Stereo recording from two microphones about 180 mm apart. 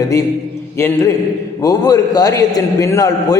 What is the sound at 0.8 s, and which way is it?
A man's voice, 15° left (ahead or behind).